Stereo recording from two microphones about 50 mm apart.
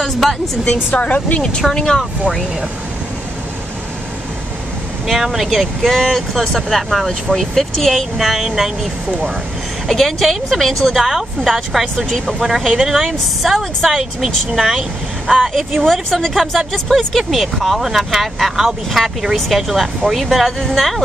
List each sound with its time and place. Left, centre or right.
0.0 s a woman's voice: centre
0.9 s speech: left
1.4 s speech: centre
5.0 s speech: centre
6.7 s speech: centre
8.2 s speech: centre
9.8 s speech: centre